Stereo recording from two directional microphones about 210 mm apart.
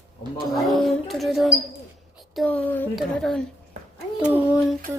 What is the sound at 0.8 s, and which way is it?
Speech, centre (ahead or behind).